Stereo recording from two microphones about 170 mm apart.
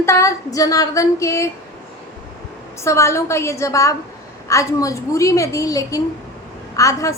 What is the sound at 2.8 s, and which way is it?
A woman's voice, 15° left (ahead or behind).